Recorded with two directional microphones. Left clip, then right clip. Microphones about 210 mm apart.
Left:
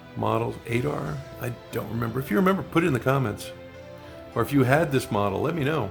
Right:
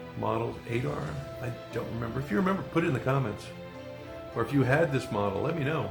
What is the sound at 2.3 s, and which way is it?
Speech, 50° left (ahead or behind).